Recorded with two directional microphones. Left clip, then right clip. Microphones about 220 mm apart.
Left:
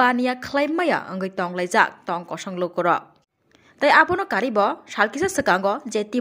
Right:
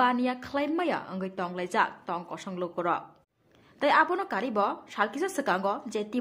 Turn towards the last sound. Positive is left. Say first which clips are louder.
# left 7 dB
turn(degrees=25)  # may be behind; listen again after turning